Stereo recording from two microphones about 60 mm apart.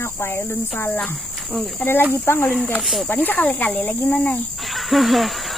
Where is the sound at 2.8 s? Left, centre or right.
Centre.